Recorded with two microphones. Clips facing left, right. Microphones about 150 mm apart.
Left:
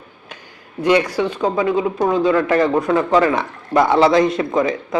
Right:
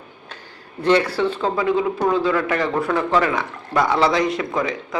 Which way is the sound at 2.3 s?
30° left (ahead or behind).